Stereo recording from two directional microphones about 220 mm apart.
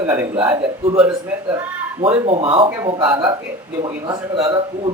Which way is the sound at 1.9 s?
25° right (ahead or behind).